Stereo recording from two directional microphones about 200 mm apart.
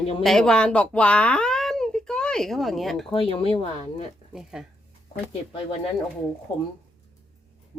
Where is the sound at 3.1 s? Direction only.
30° left (ahead or behind).